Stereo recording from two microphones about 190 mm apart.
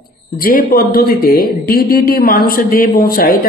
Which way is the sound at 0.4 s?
50° left (ahead or behind).